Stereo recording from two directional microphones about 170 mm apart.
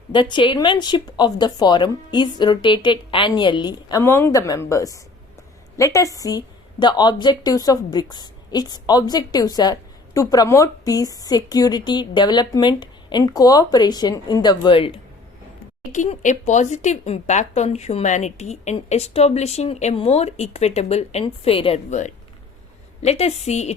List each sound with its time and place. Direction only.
0.1 s a woman's voice: 30° left (ahead or behind)
15.9 s speech: 45° left (ahead or behind)